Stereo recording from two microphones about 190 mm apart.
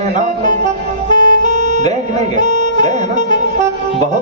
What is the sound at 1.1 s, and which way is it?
Music, 40° right (ahead or behind).